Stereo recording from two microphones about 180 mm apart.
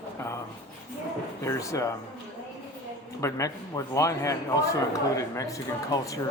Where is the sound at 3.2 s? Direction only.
15° left (ahead or behind).